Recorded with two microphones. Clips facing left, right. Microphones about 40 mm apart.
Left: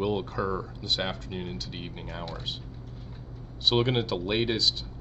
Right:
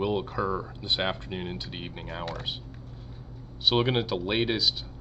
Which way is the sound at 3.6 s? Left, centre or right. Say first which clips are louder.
Even; centre.